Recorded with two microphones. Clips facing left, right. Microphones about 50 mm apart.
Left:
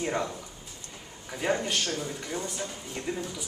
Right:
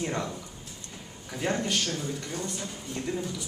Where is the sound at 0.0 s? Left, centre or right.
Centre.